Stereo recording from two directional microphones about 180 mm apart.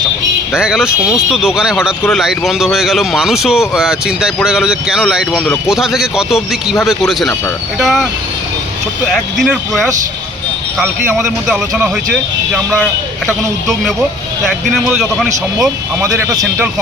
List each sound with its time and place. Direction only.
0.5 s speech: 5° right (ahead or behind)
9.1 s speech: centre (ahead or behind)
14.8 s speech: 5° right (ahead or behind)
16.0 s speech: 15° right (ahead or behind)